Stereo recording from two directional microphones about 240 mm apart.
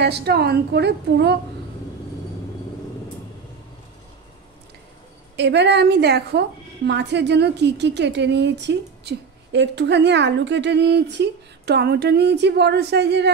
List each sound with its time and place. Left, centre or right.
0.0 s a woman's voice: right
5.3 s a woman's voice: right